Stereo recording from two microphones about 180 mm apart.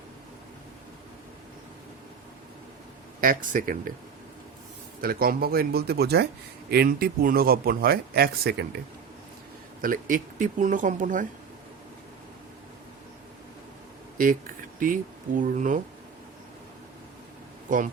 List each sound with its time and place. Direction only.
3.2 s speech: 50° right (ahead or behind)
4.9 s speech: 55° right (ahead or behind)
9.8 s speech: 50° right (ahead or behind)
14.2 s a sound: 50° right (ahead or behind)
15.4 s speech: 45° right (ahead or behind)